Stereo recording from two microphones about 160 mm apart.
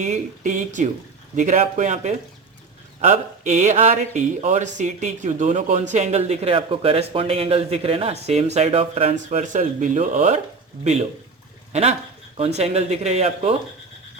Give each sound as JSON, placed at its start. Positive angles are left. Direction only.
{"t": 0.0, "sound": "a man's voice", "side_deg": -50}
{"t": 11.7, "sound": "speech", "side_deg": -45}